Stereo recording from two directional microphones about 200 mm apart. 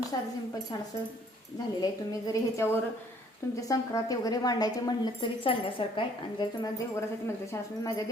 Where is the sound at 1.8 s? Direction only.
15° left (ahead or behind).